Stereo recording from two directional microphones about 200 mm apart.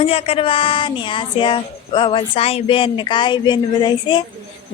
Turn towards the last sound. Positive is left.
turn(degrees=20)  # may be behind; listen again after turning